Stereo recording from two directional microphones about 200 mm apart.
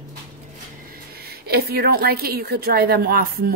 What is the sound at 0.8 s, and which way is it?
A woman's voice, 50° right (ahead or behind).